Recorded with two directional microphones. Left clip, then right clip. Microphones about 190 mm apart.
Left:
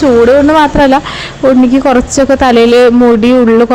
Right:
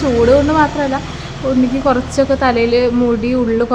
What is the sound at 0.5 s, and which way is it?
A woman's voice, 45° left (ahead or behind).